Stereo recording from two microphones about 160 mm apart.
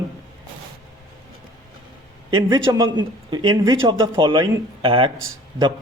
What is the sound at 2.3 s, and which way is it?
A man's voice, 30° right (ahead or behind).